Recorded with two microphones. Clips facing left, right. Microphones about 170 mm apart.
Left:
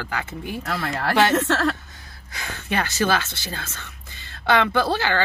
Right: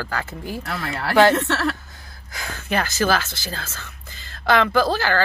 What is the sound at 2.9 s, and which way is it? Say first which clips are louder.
Speech: even; 30° left (ahead or behind).